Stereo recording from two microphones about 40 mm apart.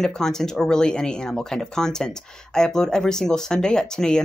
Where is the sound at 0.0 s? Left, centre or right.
Centre.